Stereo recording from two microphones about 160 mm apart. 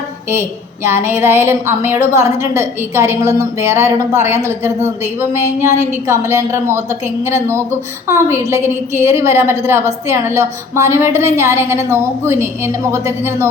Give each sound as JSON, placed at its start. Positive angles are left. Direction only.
{"t": 0.9, "sound": "a woman's voice", "side_deg": -15}
{"t": 5.8, "sound": "a woman's voice", "side_deg": -15}